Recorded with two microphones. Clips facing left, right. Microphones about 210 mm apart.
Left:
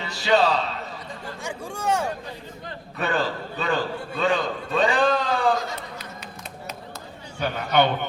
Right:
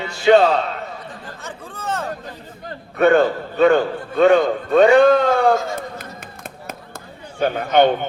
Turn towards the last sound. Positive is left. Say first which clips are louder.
# right 6 dB
turn(degrees=-50)  # may be behind; listen again after turning